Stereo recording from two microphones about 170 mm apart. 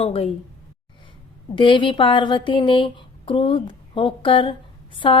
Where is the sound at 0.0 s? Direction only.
35° left (ahead or behind).